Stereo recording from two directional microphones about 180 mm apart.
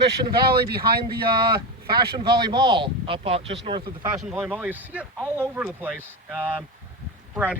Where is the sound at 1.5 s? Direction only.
25° right (ahead or behind).